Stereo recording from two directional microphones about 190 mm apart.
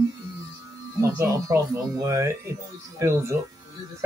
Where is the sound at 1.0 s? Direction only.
15° right (ahead or behind).